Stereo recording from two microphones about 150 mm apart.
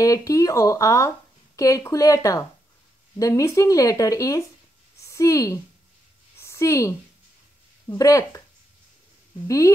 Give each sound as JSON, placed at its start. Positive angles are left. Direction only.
{"t": 0.0, "sound": "a woman's voice", "side_deg": 20}